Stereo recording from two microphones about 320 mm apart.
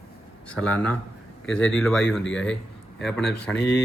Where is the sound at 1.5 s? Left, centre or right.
Centre.